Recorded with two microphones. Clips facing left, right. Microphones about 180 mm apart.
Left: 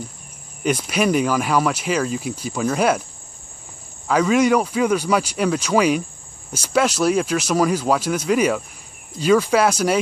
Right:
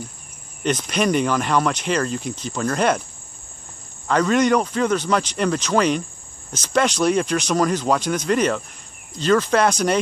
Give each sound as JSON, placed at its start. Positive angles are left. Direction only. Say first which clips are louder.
{"t": 0.7, "sound": "speech", "louder": "left 1 dB", "side_deg": 5}
{"t": 4.1, "sound": "speech", "louder": "left 1 dB", "side_deg": 5}